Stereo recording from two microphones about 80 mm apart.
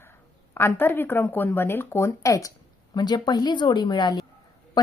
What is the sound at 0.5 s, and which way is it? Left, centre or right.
A woman's voice, left.